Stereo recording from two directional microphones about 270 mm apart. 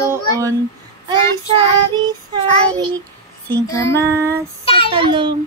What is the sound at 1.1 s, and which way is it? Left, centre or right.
Female singing, centre.